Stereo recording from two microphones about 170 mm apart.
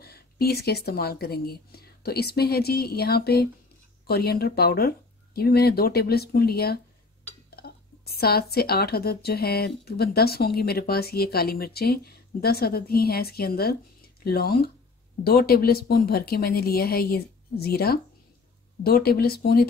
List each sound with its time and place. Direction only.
0.0 s speech: 65° left (ahead or behind)